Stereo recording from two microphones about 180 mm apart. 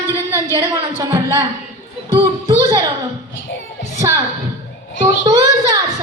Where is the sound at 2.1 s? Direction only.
20° right (ahead or behind).